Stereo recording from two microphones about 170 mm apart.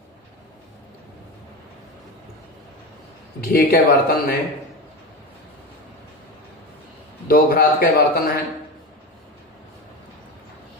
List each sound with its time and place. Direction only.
3.4 s a man's voice: 65° left (ahead or behind)
7.3 s a man's voice: 60° left (ahead or behind)